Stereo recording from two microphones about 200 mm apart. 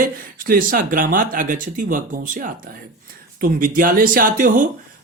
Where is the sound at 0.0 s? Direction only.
45° right (ahead or behind).